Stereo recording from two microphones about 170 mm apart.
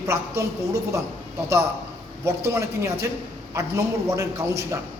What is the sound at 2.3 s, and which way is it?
A man's voice, 15° right (ahead or behind).